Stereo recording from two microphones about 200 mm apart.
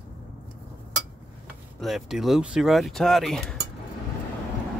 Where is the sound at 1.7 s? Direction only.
Centre (ahead or behind).